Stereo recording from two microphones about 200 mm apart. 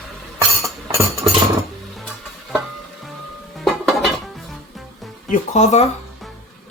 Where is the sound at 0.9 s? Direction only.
15° right (ahead or behind).